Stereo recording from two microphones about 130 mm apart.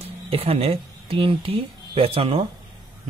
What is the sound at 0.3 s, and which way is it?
Speech, 50° right (ahead or behind).